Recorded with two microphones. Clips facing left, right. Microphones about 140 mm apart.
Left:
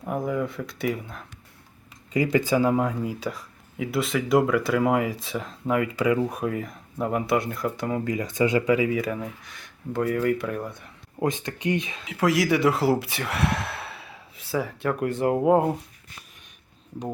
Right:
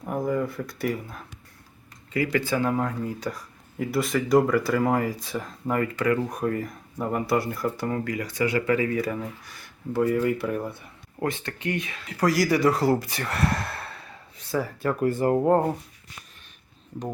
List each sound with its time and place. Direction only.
0.0 s speech: centre (ahead or behind)
2.1 s speech: 20° left (ahead or behind); by 7.9 s centre (ahead or behind)
8.0 s speech: 20° left (ahead or behind)
9.0 s speech: centre (ahead or behind)
11.2 s speech: 15° left (ahead or behind)
12.0 s speech: centre (ahead or behind)